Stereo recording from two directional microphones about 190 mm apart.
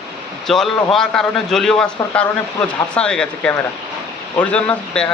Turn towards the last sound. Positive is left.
turn(degrees=5)  # may be behind; listen again after turning